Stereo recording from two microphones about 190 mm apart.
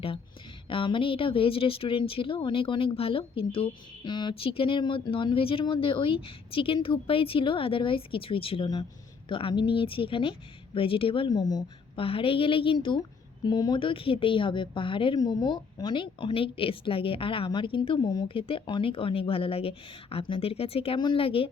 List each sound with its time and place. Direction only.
0.7 s speech: 25° left (ahead or behind)